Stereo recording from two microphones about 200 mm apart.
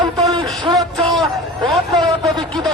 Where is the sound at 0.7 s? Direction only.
Centre (ahead or behind).